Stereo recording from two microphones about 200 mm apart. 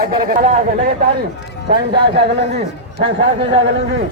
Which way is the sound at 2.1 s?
55° right (ahead or behind).